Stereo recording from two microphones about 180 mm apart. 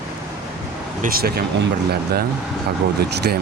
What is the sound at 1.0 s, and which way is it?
Speech, 55° right (ahead or behind).